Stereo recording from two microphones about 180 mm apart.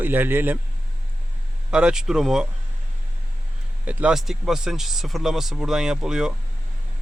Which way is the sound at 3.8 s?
5° right (ahead or behind).